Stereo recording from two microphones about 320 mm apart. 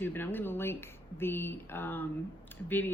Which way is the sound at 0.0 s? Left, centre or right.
Centre.